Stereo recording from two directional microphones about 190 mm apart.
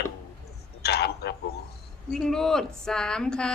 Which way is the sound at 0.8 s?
60° left (ahead or behind).